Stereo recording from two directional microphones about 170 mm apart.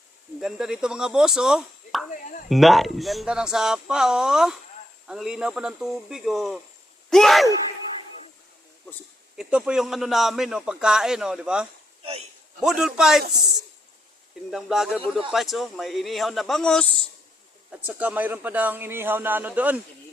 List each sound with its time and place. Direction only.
0.3 s a man's voice: centre (ahead or behind)
9.3 s a man's voice: 5° right (ahead or behind)
14.5 s a man's voice: centre (ahead or behind)
17.7 s a man's voice: 10° right (ahead or behind)